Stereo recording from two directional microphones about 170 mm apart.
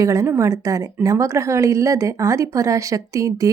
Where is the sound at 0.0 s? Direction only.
20° right (ahead or behind).